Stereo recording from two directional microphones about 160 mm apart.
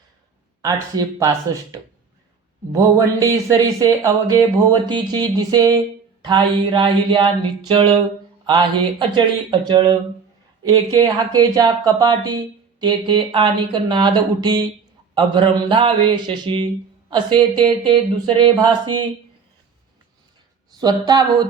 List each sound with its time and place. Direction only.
0.6 s speech: 20° right (ahead or behind)
2.7 s speech: 20° right (ahead or behind)
6.2 s mantra: 30° right (ahead or behind)
8.4 s speech: 30° right (ahead or behind)
15.1 s mantra: 30° right (ahead or behind)
17.1 s speech: 30° right (ahead or behind)
20.7 s speech: 25° right (ahead or behind)